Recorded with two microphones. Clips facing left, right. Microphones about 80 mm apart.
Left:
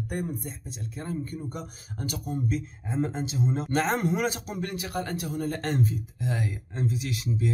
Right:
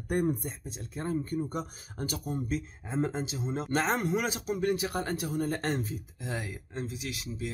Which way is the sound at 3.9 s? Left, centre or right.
Centre.